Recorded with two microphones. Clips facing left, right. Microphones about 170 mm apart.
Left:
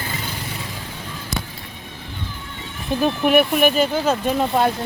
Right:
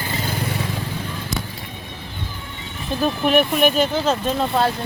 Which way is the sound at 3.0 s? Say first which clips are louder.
Left 1 dB; 10° left (ahead or behind).